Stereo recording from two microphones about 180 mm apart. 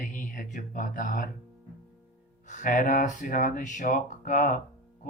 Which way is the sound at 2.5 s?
45° left (ahead or behind).